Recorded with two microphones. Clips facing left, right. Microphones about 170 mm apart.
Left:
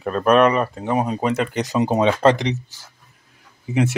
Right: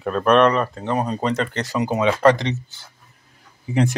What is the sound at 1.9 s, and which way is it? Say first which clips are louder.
Speech: right 1 dB; 30° left (ahead or behind).